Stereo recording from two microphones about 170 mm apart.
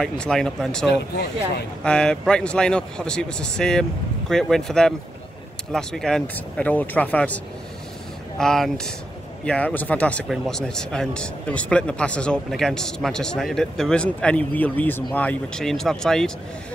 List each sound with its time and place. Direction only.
0.0 s speech: 5° left (ahead or behind)
1.1 s speech: 75° left (ahead or behind)
1.8 s speech: 5° left (ahead or behind)
8.4 s speech: centre (ahead or behind)